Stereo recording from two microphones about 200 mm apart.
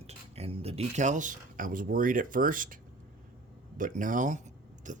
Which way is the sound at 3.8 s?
40° right (ahead or behind).